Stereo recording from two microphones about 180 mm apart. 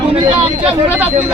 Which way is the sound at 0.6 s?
10° right (ahead or behind).